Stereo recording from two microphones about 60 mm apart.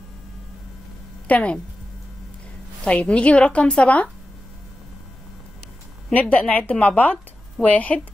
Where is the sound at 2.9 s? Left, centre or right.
Centre.